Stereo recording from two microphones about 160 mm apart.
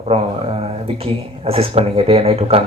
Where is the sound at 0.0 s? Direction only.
40° right (ahead or behind).